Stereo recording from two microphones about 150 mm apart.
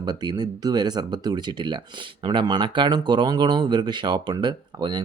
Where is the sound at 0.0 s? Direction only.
30° right (ahead or behind).